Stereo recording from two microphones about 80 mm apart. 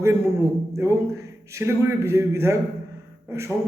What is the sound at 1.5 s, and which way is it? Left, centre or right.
Speech, right.